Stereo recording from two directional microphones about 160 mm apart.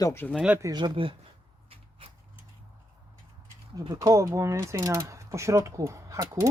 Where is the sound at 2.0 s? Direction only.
35° right (ahead or behind).